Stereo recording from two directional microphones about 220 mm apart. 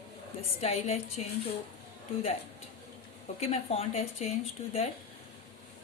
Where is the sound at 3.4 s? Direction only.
30° left (ahead or behind).